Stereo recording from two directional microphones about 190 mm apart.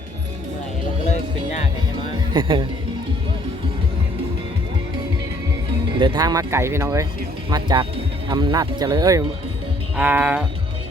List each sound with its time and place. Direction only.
2.3 s speech: 25° right (ahead or behind)
6.0 s speech: 20° right (ahead or behind)
10.0 s speech: 10° right (ahead or behind)